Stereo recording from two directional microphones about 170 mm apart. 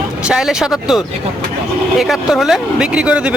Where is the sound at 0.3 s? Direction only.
5° right (ahead or behind).